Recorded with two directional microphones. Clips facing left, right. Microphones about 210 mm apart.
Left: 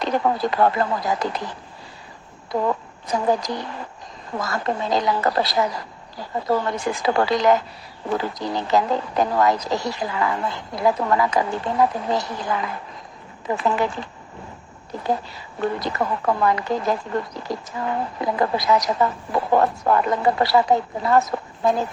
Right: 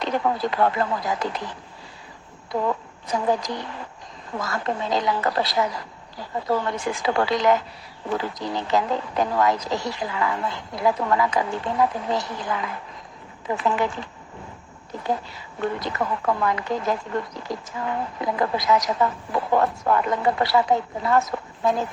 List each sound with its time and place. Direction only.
0.0 s a woman's voice: 40° left (ahead or behind)